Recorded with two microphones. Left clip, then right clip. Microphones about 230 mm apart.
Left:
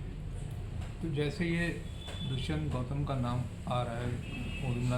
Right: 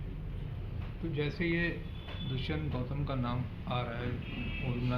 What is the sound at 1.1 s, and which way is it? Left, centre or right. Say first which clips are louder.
A man's voice: right 1 dB; left.